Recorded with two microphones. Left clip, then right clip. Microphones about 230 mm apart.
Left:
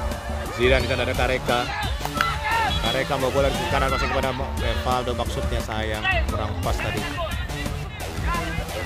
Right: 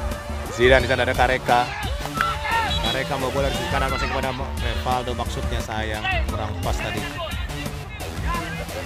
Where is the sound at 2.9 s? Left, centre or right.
Centre.